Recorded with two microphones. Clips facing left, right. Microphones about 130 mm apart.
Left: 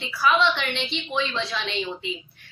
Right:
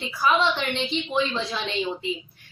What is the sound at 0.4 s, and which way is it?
Speech, 40° right (ahead or behind).